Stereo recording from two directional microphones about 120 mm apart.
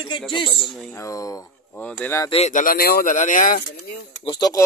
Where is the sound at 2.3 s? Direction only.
75° left (ahead or behind).